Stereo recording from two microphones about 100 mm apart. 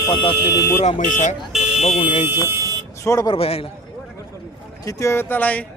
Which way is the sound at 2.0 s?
60° left (ahead or behind).